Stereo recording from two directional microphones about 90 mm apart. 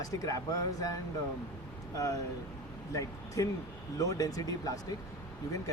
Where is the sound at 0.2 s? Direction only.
40° left (ahead or behind).